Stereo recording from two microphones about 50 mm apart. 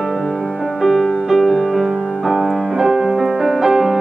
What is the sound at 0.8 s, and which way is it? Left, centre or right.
Music, centre.